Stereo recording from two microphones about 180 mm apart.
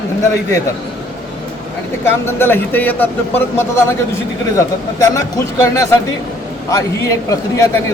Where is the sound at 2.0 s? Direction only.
10° left (ahead or behind).